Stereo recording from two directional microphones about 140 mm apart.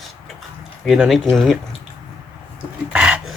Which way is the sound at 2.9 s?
5° right (ahead or behind).